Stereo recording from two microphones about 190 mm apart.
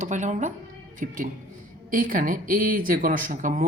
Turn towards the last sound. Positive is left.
turn(degrees=-45)  # may be behind; listen again after turning